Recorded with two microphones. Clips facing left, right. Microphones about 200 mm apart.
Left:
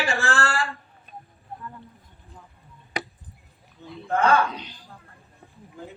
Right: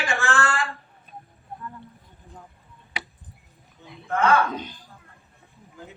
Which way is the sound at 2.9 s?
45° left (ahead or behind).